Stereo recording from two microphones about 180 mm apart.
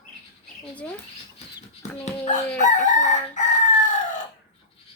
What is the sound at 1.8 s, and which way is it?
Speech, 40° left (ahead or behind).